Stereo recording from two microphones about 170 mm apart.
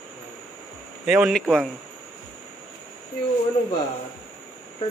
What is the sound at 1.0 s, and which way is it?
Speech, 5° right (ahead or behind).